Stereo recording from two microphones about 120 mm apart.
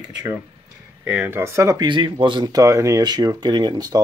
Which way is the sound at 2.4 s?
30° right (ahead or behind).